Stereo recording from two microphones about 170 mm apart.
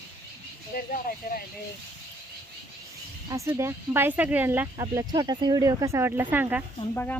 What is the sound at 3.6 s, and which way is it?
Speech, 15° right (ahead or behind).